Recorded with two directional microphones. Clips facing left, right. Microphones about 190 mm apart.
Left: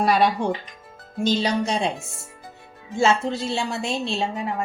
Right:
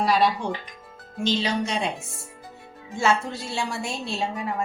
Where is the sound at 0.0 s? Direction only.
55° left (ahead or behind).